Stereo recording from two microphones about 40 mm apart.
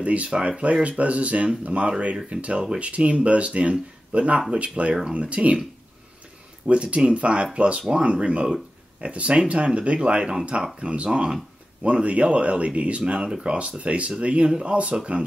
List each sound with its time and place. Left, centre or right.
0.0 s speech: right
6.7 s speech: right